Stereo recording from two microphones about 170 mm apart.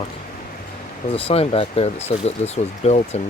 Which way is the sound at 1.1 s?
35° left (ahead or behind).